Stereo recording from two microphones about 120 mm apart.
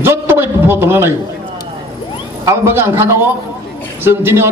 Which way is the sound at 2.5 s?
20° right (ahead or behind).